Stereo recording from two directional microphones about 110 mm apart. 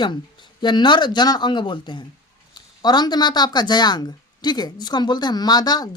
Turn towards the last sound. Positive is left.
turn(degrees=35)  # may be behind; listen again after turning